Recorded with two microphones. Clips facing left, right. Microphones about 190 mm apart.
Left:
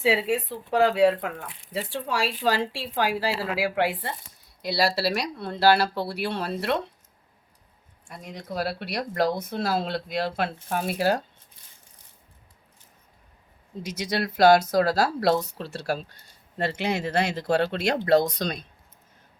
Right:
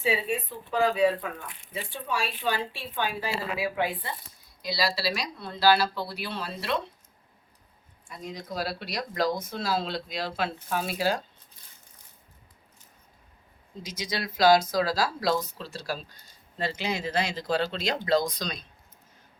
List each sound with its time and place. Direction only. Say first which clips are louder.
0.0 s speech: left 4 dB; 90° left; by 1.5 s 75° left (ahead or behind)
1.7 s speech: left 4 dB; 90° left
4.6 s speech: left 4 dB; 65° left (ahead or behind)
8.0 s speech: even; 60° left (ahead or behind)
14.0 s speech: left 4 dB; 60° left (ahead or behind)